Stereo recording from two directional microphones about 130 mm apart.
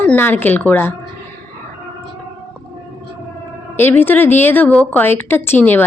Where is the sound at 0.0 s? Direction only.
15° left (ahead or behind).